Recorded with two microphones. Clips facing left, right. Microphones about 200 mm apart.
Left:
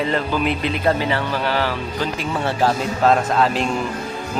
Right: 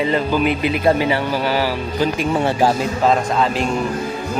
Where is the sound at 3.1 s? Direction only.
Centre (ahead or behind).